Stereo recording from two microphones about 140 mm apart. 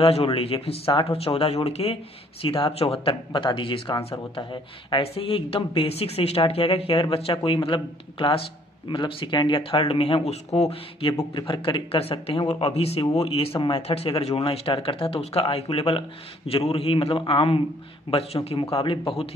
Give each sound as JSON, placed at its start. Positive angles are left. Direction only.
{"t": 0.0, "sound": "speech", "side_deg": 45}